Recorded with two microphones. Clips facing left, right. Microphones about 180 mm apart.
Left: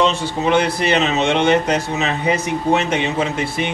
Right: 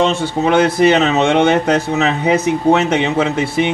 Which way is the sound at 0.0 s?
55° right (ahead or behind).